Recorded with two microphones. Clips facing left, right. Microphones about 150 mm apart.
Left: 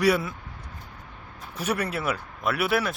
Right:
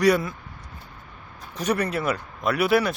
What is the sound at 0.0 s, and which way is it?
Speech, 5° left (ahead or behind).